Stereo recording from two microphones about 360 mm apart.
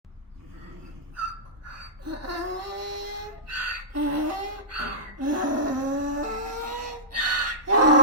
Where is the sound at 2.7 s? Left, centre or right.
Right.